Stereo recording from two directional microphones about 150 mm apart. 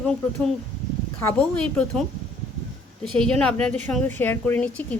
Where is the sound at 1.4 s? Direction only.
10° left (ahead or behind).